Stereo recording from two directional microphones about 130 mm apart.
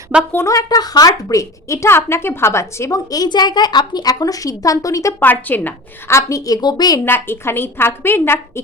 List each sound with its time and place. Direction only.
0.3 s a woman's voice: 20° left (ahead or behind)
7.0 s a woman's voice: 15° left (ahead or behind)